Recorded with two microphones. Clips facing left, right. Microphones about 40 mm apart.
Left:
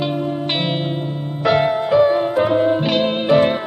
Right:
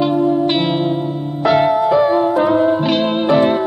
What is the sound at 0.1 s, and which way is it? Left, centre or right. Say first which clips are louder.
Music: right 7 dB; left.